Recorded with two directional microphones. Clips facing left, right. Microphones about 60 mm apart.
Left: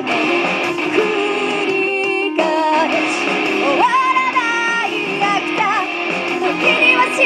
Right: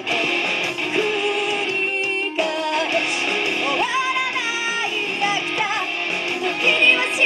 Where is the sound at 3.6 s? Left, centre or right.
Centre.